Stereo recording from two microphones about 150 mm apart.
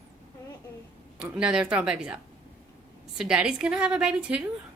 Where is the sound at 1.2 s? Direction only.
5° right (ahead or behind).